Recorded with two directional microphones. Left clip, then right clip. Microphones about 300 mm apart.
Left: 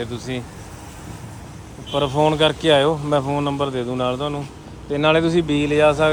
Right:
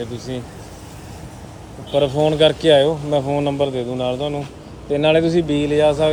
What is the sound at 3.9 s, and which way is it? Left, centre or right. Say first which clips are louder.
Speech: even; left.